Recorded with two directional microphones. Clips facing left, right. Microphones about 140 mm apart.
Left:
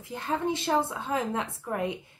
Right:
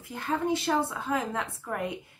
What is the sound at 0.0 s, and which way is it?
Speech, 20° left (ahead or behind).